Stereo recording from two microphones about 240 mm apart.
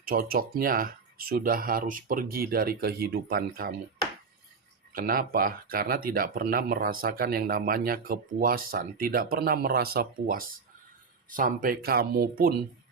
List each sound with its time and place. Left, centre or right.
0.0 s speech: right
4.9 s speech: right